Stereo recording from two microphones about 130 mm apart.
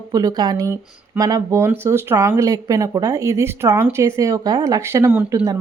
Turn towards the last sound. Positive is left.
turn(degrees=-25)  # may be behind; listen again after turning